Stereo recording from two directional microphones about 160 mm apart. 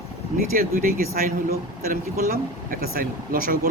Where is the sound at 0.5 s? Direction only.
65° right (ahead or behind).